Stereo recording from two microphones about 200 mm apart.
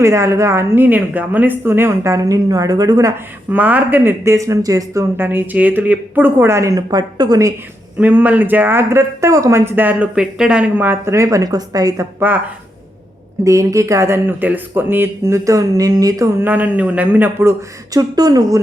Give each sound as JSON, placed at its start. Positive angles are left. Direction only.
{"t": 0.0, "sound": "a woman's voice", "side_deg": -15}
{"t": 13.4, "sound": "a woman's voice", "side_deg": -15}
{"t": 17.9, "sound": "speech", "side_deg": -20}